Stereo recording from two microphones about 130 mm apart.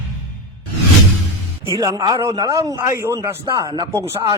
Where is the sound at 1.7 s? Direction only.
30° right (ahead or behind).